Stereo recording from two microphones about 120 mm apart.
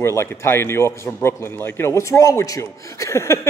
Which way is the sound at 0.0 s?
20° left (ahead or behind).